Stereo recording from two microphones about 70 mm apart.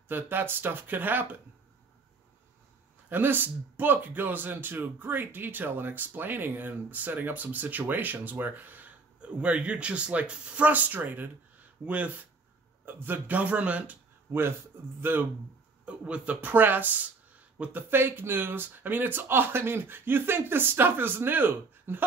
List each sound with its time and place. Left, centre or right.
0.1 s speech: right
3.1 s speech: right
15.0 s speech: right
15.8 s speech: centre